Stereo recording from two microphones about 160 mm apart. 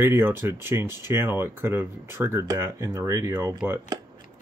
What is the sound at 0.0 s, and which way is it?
Speech, 15° right (ahead or behind).